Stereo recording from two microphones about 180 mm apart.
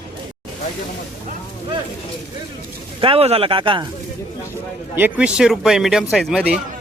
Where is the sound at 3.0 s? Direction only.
30° right (ahead or behind).